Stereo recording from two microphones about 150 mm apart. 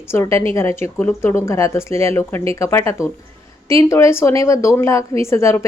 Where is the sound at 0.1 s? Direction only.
15° left (ahead or behind).